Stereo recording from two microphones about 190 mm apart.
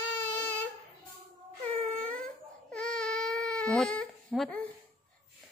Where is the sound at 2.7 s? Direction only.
5° left (ahead or behind).